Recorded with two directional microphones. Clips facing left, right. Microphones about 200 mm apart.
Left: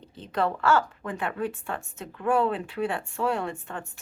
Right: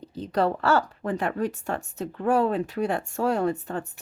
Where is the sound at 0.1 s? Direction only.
40° right (ahead or behind).